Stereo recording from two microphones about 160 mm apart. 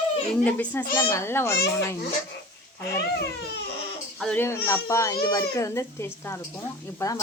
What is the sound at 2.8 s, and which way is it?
Speech, 90° left.